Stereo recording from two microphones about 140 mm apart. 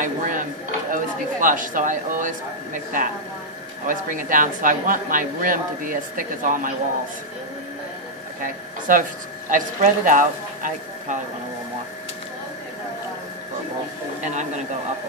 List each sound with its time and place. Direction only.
0.0 s speech: 70° right (ahead or behind)
8.4 s speech: 75° right (ahead or behind)
14.2 s speech: 55° right (ahead or behind)